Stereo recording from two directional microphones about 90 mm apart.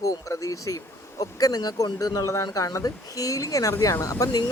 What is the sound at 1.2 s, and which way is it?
Speech, 45° left (ahead or behind).